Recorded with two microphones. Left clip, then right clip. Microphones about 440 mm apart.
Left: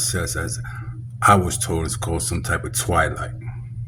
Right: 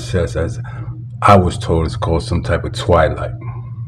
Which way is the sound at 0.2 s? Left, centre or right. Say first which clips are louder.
Right 7 dB; left.